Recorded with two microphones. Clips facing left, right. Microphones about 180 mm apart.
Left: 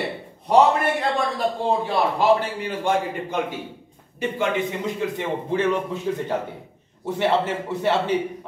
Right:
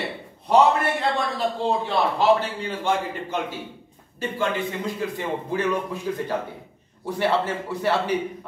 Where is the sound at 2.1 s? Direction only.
15° left (ahead or behind).